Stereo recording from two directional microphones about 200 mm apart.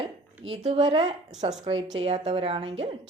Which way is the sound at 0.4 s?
30° right (ahead or behind).